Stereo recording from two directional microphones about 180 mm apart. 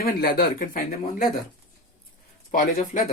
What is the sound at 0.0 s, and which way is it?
Speech, 55° left (ahead or behind).